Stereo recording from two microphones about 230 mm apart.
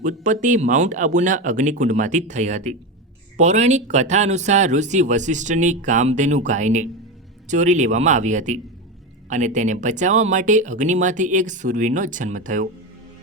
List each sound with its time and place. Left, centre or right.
0.0 s speech: right